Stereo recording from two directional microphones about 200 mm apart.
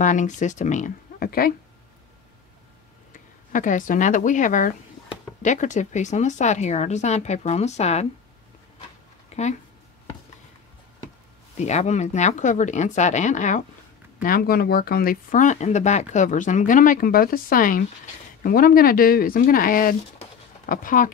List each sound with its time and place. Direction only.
0.0 s speech: 40° left (ahead or behind)
3.1 s speech: 40° left (ahead or behind)
9.3 s speech: 35° left (ahead or behind)
11.5 s speech: 35° left (ahead or behind)
20.2 s a sound: 45° left (ahead or behind)